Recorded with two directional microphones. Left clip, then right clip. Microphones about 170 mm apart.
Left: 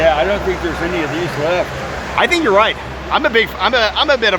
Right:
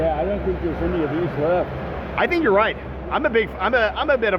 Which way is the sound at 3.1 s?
25° left (ahead or behind).